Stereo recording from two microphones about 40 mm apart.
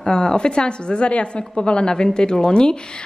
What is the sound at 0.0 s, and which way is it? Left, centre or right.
A woman's voice, centre.